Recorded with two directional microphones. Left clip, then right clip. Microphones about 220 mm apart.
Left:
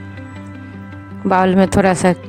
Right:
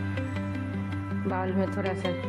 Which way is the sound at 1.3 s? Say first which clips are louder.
Left 17 dB; 50° left (ahead or behind).